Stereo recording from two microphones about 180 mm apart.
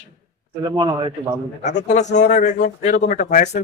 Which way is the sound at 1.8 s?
40° left (ahead or behind).